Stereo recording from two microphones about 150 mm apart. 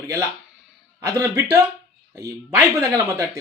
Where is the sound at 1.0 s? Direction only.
15° right (ahead or behind).